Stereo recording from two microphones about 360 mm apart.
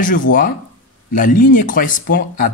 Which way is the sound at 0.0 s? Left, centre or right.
Left.